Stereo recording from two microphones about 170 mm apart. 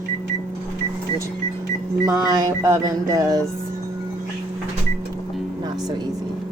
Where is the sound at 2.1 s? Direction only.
20° right (ahead or behind).